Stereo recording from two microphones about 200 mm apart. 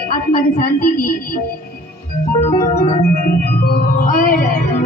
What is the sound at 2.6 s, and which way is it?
Speech, 35° left (ahead or behind).